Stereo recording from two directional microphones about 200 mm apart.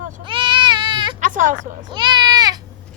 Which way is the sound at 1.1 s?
40° right (ahead or behind).